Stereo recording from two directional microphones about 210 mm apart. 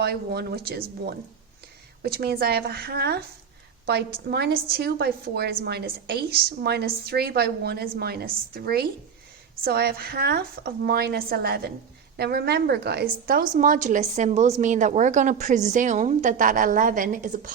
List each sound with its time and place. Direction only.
0.0 s a woman's voice: 50° right (ahead or behind)